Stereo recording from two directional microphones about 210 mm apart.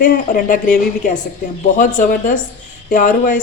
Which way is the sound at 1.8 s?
40° left (ahead or behind).